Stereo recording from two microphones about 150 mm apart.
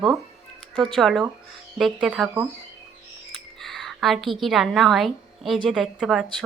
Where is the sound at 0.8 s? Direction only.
Centre (ahead or behind).